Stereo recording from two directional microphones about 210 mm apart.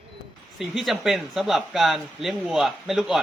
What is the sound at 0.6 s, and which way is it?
Speech, centre (ahead or behind).